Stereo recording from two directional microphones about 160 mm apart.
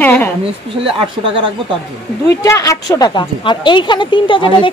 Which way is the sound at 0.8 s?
35° right (ahead or behind).